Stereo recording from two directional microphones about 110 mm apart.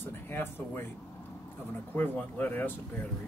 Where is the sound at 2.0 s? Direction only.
15° left (ahead or behind).